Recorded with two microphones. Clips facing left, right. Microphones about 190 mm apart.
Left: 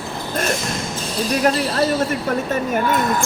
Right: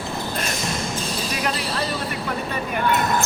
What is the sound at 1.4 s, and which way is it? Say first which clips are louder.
Speech: left 9 dB; 45° left (ahead or behind).